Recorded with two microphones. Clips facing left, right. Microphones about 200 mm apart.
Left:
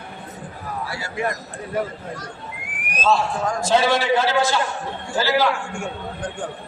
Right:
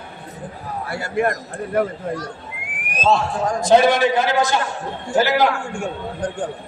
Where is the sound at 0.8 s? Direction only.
55° right (ahead or behind).